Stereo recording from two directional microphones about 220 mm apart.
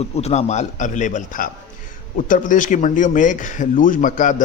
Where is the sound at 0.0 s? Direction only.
30° left (ahead or behind).